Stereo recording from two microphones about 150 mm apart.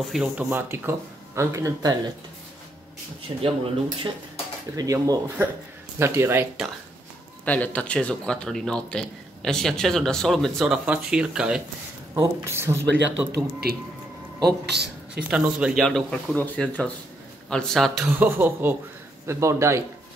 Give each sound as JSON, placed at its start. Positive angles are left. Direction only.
{"t": 0.0, "sound": "speech", "side_deg": -5}
{"t": 3.4, "sound": "speech", "side_deg": -40}
{"t": 4.7, "sound": "speech", "side_deg": -25}
{"t": 7.4, "sound": "speech", "side_deg": 10}
{"t": 12.2, "sound": "speech", "side_deg": -15}
{"t": 13.3, "sound": "a man's voice", "side_deg": -90}
{"t": 15.2, "sound": "speech", "side_deg": -10}
{"t": 18.0, "sound": "speech", "side_deg": -10}